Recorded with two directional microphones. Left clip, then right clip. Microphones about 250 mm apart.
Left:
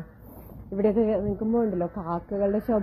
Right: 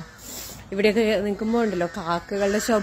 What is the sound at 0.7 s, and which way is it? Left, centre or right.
A woman's voice, right.